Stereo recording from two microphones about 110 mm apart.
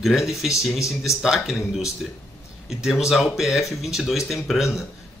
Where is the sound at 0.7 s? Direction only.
30° left (ahead or behind).